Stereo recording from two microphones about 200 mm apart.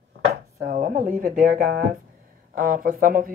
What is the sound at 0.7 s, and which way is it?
Speech, 45° right (ahead or behind).